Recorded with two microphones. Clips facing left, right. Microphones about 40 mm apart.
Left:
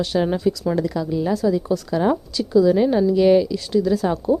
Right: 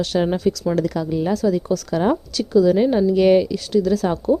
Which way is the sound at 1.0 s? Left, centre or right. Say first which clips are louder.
Right 1 dB; centre.